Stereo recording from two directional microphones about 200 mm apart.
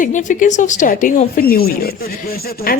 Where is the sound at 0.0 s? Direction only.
40° left (ahead or behind).